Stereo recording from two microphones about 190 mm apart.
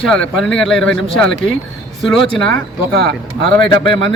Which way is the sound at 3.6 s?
25° left (ahead or behind).